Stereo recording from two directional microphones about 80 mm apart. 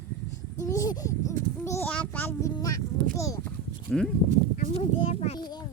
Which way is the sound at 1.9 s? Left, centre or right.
Centre.